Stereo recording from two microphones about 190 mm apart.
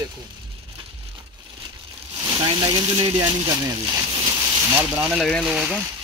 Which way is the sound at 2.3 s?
25° right (ahead or behind).